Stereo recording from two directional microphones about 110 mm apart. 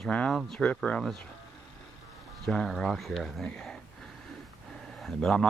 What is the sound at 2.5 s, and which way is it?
Speech, centre (ahead or behind).